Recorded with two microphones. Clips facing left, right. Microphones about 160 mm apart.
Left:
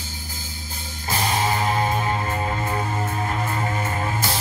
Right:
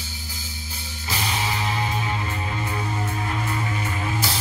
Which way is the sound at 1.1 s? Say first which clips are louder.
Left 5 dB; 45° left (ahead or behind).